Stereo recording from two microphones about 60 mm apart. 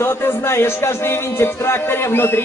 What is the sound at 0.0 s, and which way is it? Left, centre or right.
Music, left.